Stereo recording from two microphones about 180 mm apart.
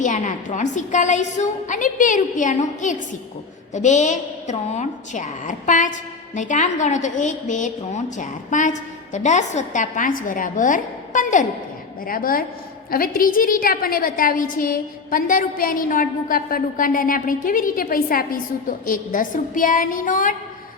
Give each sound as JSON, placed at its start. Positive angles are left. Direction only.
{"t": 0.0, "sound": "a woman's voice", "side_deg": 45}